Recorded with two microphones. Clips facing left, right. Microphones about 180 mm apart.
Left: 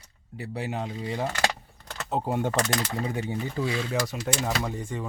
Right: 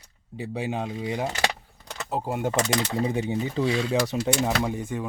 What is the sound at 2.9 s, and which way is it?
Speech, 20° right (ahead or behind).